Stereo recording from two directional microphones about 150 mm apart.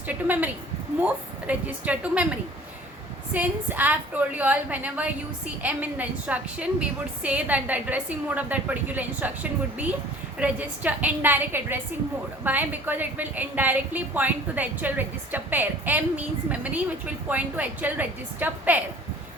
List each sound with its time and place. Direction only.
0.1 s a woman's voice: 10° right (ahead or behind)